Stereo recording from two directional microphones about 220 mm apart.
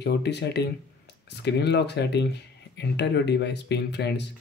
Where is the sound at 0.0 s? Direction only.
50° left (ahead or behind).